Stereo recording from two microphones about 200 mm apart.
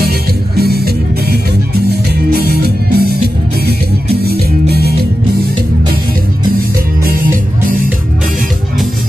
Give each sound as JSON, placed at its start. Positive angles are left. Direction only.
{"t": 0.6, "sound": "music", "side_deg": -50}